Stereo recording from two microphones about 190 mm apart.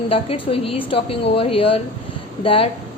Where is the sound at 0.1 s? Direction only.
30° left (ahead or behind).